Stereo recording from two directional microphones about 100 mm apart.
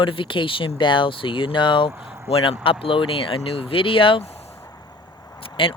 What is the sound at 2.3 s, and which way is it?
Speech, 80° left.